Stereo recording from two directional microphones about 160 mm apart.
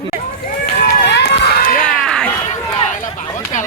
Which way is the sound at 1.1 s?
90° left.